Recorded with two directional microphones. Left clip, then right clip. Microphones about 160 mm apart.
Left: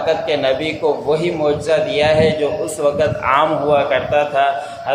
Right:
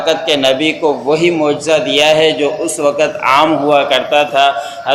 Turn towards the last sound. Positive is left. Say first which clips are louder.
# right 4 dB
turn(degrees=-35)  # may be behind; listen again after turning